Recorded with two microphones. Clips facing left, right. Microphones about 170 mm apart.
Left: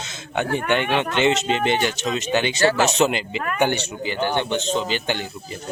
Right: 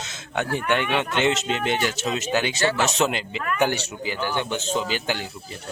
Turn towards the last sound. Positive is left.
turn(degrees=-5)  # may be behind; listen again after turning